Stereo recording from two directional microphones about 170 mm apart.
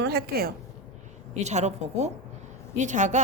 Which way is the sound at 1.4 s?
40° right (ahead or behind).